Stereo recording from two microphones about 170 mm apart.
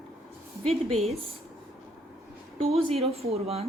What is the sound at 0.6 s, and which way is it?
Speech, 35° right (ahead or behind).